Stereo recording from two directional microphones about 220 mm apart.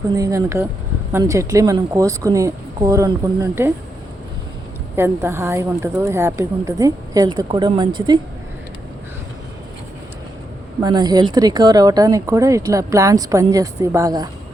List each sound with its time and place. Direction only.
0.2 s speech: 15° right (ahead or behind)
4.9 s speech: 10° right (ahead or behind)
10.8 s speech: 20° right (ahead or behind)